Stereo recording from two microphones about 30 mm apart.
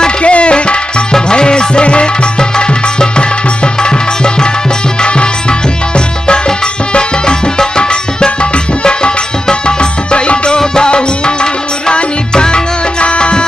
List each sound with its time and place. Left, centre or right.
0.2 s music: left